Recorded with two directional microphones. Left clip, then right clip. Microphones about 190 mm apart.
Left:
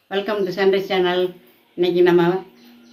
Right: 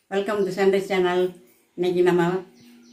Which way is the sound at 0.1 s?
10° right (ahead or behind).